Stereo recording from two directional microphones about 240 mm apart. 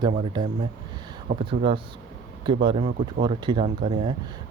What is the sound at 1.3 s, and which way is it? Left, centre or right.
Speech, right.